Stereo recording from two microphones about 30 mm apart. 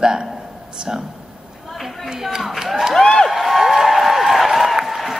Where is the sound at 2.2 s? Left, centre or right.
Centre.